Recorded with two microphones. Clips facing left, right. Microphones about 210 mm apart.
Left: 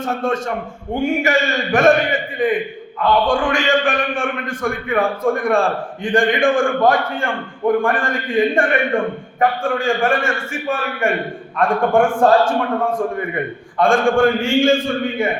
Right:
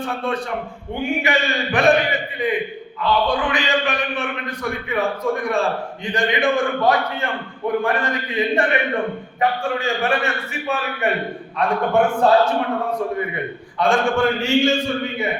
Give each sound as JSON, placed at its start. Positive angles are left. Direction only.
{"t": 0.0, "sound": "a man's voice", "side_deg": 45}